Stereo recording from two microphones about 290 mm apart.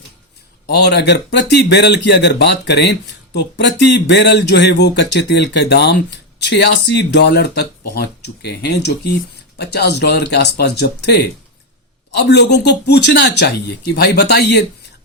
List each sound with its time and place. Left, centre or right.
0.7 s speech: left